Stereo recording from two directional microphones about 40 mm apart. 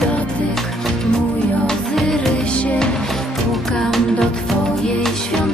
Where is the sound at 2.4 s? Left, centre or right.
Left.